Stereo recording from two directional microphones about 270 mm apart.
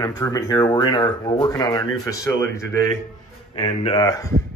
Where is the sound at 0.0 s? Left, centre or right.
Centre.